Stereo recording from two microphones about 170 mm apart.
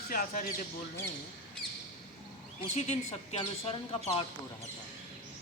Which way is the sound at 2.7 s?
40° left (ahead or behind).